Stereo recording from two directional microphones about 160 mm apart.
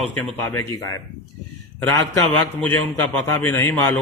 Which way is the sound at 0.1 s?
15° left (ahead or behind).